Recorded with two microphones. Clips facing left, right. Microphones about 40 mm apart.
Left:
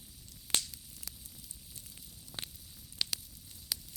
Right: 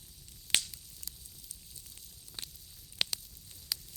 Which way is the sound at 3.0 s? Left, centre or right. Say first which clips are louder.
Right 2 dB; right.